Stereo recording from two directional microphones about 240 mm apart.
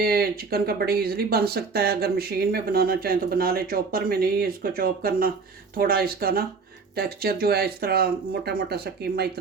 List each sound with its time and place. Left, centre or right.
0.0 s speech: right